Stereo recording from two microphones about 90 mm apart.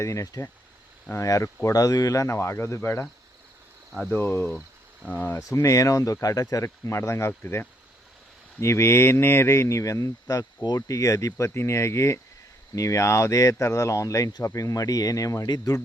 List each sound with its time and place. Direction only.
0.0 s speech: 35° left (ahead or behind)
4.1 s speech: 20° left (ahead or behind)
5.4 s speech: 40° left (ahead or behind)